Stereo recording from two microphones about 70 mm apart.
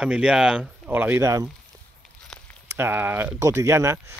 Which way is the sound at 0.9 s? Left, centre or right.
Right.